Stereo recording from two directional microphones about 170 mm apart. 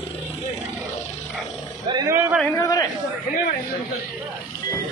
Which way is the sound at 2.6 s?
20° left (ahead or behind).